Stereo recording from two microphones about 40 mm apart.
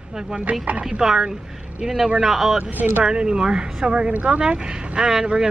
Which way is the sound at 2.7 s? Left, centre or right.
Right.